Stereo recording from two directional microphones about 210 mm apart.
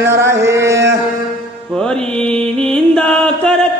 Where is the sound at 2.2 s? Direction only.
5° left (ahead or behind).